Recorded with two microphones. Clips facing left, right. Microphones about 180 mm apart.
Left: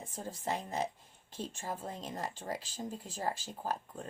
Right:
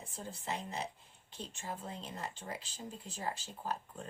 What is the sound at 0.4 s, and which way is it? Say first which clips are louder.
Speech: left 5 dB; 45° left (ahead or behind).